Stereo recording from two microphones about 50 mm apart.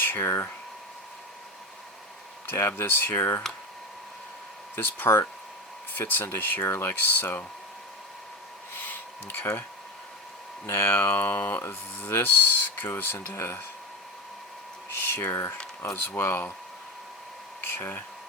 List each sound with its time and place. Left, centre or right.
0.0 s a sound: left
0.3 s speech: left
2.5 s speech: left
4.7 s speech: left
7.1 s speech: left
8.7 s a sound: left
10.7 s speech: left
11.6 s speech: left
13.3 s speech: left
14.8 s speech: left
17.6 s speech: left